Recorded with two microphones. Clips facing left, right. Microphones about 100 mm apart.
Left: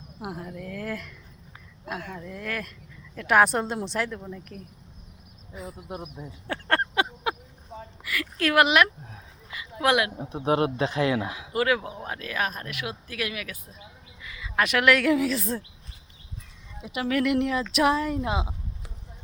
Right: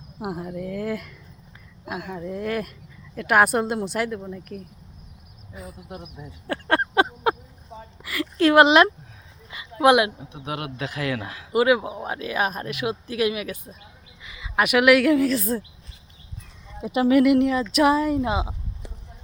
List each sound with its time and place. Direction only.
0.2 s speech: 20° right (ahead or behind)
2.1 s speech: 20° right (ahead or behind)
3.2 s a woman's voice: 5° right (ahead or behind)
6.5 s a sound: 10° right (ahead or behind)
6.9 s a sound: 40° right (ahead or behind)
7.7 s a sound: centre (ahead or behind)
8.0 s speech: 30° right (ahead or behind)
10.2 s speech: 35° left (ahead or behind); by 11.4 s 20° left (ahead or behind)
11.5 s speech: 15° right (ahead or behind)
16.8 s speech: 30° right (ahead or behind)
17.1 s a woman's voice: 10° right (ahead or behind)